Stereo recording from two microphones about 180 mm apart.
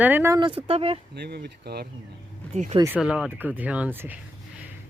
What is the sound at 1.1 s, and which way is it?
Speech, 65° right (ahead or behind).